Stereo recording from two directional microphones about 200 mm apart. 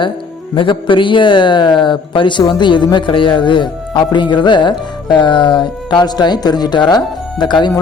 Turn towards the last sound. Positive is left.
turn(degrees=20)  # may be behind; listen again after turning